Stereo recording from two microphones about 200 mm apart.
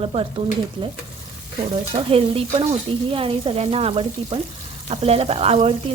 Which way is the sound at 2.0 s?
30° right (ahead or behind).